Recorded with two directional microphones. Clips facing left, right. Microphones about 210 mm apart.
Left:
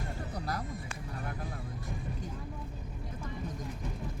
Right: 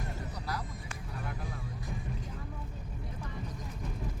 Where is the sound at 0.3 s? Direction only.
55° left (ahead or behind).